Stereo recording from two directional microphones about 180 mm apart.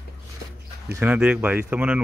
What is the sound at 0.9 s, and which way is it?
Speech, 10° right (ahead or behind).